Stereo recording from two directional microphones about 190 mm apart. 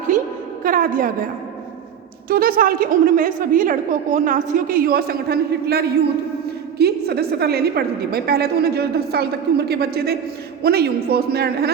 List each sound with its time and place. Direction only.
0.6 s a woman's voice: 45° right (ahead or behind)
2.3 s a woman's voice: 50° right (ahead or behind)